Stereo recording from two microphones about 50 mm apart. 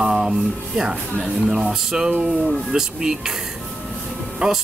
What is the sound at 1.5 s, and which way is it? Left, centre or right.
Speech, centre.